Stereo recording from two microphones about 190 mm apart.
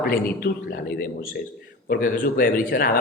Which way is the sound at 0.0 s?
50° left (ahead or behind).